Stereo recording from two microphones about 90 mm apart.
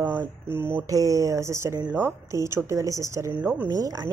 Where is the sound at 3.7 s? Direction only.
45° right (ahead or behind).